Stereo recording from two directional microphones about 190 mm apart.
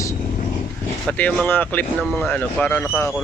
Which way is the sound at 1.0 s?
5° left (ahead or behind).